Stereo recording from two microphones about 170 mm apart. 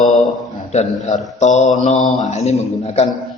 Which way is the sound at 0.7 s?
40° left (ahead or behind).